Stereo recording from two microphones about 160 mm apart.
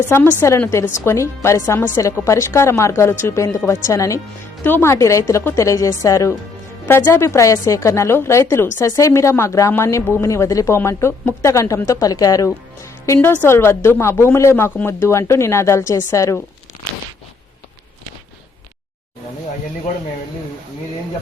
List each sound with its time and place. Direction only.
0.0 s a woman's voice: 15° left (ahead or behind)